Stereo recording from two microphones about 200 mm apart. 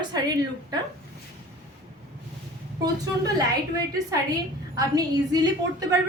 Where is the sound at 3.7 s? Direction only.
20° right (ahead or behind).